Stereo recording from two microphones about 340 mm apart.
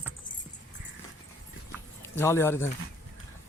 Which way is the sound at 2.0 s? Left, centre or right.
Centre.